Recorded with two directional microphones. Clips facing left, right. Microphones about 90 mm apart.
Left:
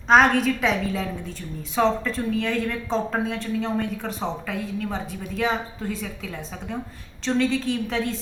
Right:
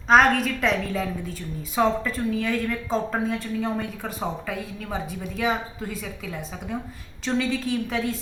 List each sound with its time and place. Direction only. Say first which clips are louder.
0.1 s a woman's voice: left 1 dB; centre (ahead or behind)